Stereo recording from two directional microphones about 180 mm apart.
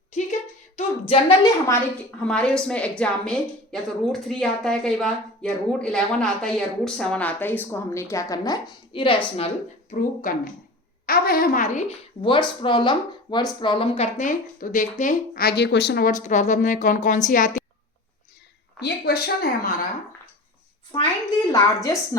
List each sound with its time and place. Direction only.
0.8 s a woman's voice: 30° left (ahead or behind)
9.9 s a woman's voice: 45° left (ahead or behind)
12.2 s a woman's voice: 25° left (ahead or behind); by 17.6 s 45° left (ahead or behind)
18.8 s a woman's voice: 60° left (ahead or behind)
21.5 s a woman's voice: 20° left (ahead or behind)